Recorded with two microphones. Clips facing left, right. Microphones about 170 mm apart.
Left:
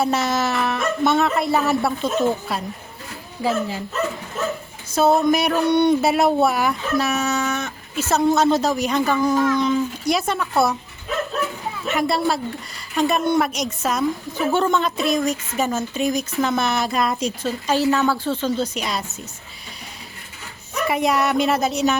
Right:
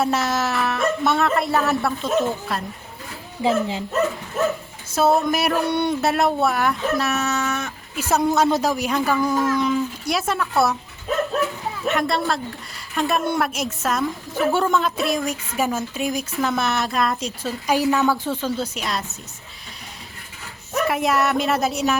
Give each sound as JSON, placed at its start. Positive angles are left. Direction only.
{"t": 0.0, "sound": "a woman's voice", "side_deg": 0}
{"t": 3.4, "sound": "speech", "side_deg": -20}
{"t": 4.9, "sound": "a woman's voice", "side_deg": -5}
{"t": 9.1, "sound": "speech", "side_deg": 10}
{"t": 9.4, "sound": "a woman's voice", "side_deg": -5}
{"t": 11.9, "sound": "a woman's voice", "side_deg": 5}
{"t": 17.4, "sound": "a woman's voice", "side_deg": -10}
{"t": 20.7, "sound": "a woman's voice", "side_deg": 0}